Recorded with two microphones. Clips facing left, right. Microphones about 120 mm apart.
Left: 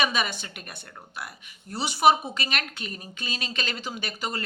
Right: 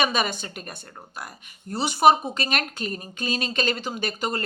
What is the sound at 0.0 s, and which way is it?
Speech, 50° right (ahead or behind).